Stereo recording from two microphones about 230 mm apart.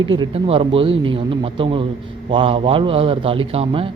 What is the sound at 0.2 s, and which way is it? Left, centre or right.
Speech, right.